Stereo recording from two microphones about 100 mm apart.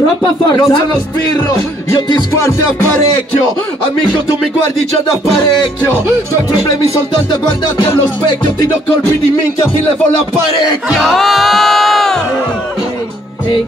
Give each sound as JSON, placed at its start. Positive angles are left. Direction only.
{"t": 0.2, "sound": "music", "side_deg": 40}
{"t": 11.0, "sound": "music", "side_deg": 0}